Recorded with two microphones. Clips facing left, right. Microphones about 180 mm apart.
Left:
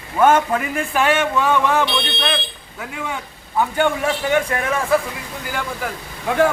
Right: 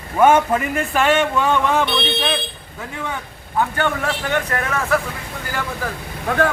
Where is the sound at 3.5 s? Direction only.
10° left (ahead or behind).